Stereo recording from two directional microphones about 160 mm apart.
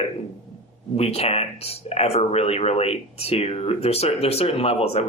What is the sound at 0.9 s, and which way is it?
Speech, 40° left (ahead or behind).